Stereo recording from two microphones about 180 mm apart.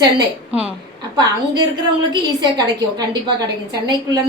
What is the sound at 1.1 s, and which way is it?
Speech, 25° right (ahead or behind).